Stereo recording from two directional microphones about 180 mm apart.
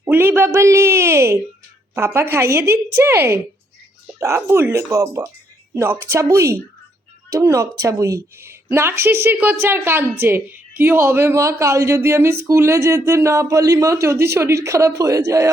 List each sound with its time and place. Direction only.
0.0 s a woman's voice: 15° right (ahead or behind)